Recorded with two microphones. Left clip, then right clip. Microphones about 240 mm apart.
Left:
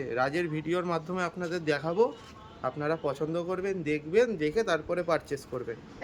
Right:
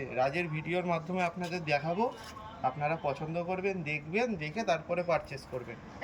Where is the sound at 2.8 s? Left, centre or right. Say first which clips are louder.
Left 2 dB; centre.